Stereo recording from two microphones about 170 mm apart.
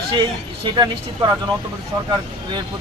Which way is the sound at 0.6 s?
25° right (ahead or behind).